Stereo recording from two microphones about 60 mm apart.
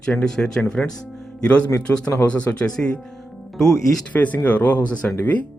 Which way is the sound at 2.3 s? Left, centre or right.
Centre.